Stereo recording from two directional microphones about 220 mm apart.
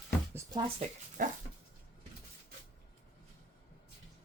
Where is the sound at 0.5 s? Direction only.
30° right (ahead or behind).